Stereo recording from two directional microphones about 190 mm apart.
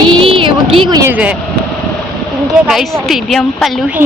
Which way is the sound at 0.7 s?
20° right (ahead or behind).